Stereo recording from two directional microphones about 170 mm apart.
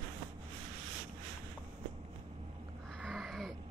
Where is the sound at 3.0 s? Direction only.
Centre (ahead or behind).